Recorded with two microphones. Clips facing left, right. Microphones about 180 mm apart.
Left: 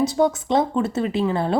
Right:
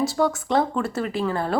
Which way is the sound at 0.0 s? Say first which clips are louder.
Left 3 dB; 20° left (ahead or behind).